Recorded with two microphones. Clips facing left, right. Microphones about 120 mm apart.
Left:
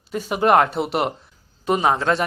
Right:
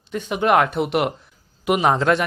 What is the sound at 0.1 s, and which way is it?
Speech, 5° left (ahead or behind).